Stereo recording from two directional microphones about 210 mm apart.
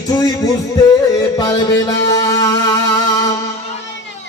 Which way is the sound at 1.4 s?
15° left (ahead or behind).